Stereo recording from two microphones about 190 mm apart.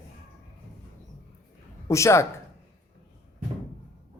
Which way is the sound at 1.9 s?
15° left (ahead or behind).